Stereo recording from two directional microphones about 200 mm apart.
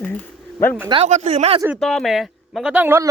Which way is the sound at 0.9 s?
30° right (ahead or behind).